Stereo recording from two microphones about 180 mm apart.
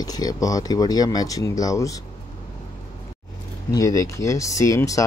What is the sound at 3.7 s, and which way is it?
Speech, 20° left (ahead or behind).